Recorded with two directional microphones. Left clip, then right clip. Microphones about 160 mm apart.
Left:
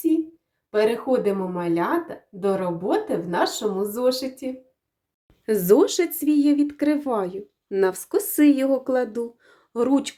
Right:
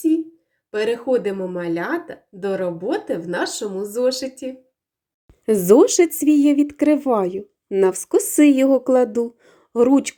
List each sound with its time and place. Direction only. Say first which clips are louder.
0.7 s speech: right 1 dB; 5° left (ahead or behind)
5.5 s speech: right 4 dB; 25° right (ahead or behind)